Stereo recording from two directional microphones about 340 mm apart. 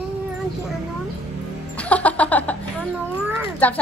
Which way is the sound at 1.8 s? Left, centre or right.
Centre.